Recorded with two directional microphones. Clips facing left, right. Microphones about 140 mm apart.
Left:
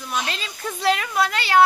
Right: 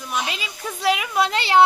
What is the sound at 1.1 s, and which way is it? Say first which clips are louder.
Speech: right 1 dB; 20° right (ahead or behind).